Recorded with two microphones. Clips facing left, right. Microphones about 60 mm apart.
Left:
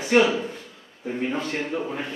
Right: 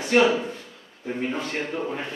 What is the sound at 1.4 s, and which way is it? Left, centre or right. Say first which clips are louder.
Speech: left 1 dB; centre.